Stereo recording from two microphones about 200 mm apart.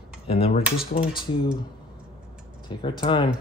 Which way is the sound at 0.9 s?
45° left (ahead or behind).